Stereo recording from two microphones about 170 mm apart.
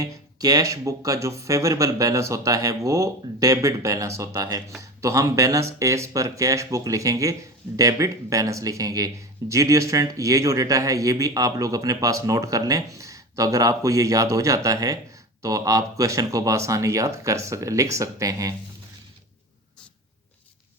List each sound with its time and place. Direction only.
0.0 s speech: 20° right (ahead or behind)